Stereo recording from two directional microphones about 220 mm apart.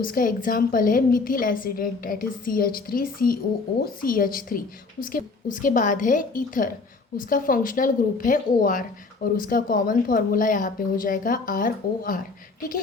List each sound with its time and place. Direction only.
0.0 s a woman's voice: 40° left (ahead or behind)